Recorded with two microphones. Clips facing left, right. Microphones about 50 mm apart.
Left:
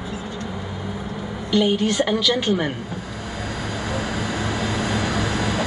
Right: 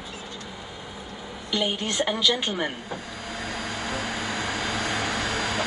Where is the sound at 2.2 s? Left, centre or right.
Right.